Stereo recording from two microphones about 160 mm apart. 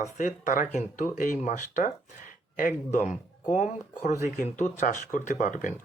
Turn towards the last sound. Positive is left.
turn(degrees=50)  # may be behind; listen again after turning